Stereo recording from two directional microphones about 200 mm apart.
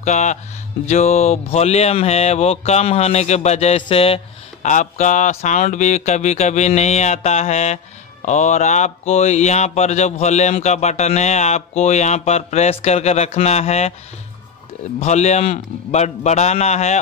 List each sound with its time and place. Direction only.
0.0 s speech: 35° left (ahead or behind)
15.0 s speech: 35° left (ahead or behind)